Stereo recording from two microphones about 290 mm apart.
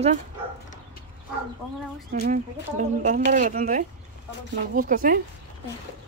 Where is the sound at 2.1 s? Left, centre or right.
Right.